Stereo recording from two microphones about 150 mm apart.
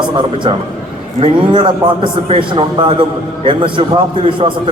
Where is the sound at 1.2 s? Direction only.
35° right (ahead or behind).